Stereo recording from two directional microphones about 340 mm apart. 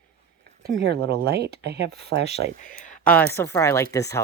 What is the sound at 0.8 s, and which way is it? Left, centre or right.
Speech, right.